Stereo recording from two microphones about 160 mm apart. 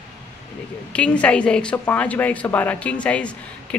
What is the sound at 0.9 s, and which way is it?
A woman's voice, 10° left (ahead or behind).